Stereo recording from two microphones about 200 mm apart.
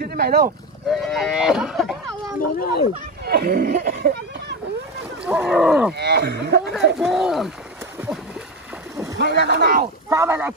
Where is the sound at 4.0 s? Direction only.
55° right (ahead or behind).